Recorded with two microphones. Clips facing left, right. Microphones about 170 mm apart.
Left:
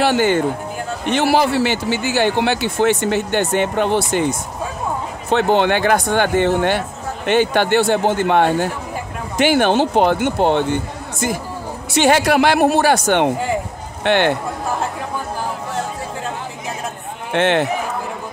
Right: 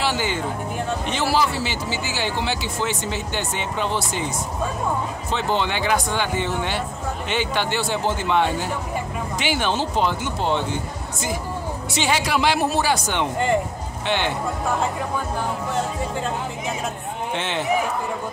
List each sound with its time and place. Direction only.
0.0 s a man's voice: 55° left (ahead or behind)
5.3 s a man's voice: 60° left (ahead or behind)
17.3 s a man's voice: 65° left (ahead or behind)